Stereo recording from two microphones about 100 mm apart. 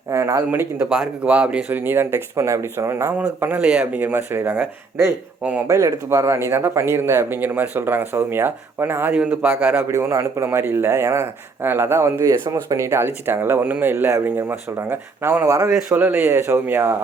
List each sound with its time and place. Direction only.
0.1 s a man's voice: 30° right (ahead or behind)
0.9 s a man's voice: 10° right (ahead or behind); by 3.1 s 25° right (ahead or behind)
3.2 s a man's voice: 15° right (ahead or behind)
15.4 s a man's voice: 30° right (ahead or behind)
16.0 s a man's voice: 20° right (ahead or behind)